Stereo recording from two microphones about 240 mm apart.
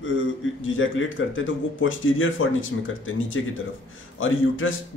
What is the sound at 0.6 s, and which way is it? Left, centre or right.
A man's voice, left.